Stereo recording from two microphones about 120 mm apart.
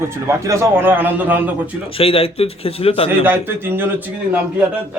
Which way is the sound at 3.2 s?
15° right (ahead or behind).